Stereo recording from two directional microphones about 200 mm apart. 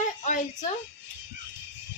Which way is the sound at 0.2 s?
35° left (ahead or behind).